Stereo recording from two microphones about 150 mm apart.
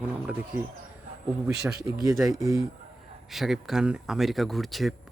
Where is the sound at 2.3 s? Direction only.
20° right (ahead or behind).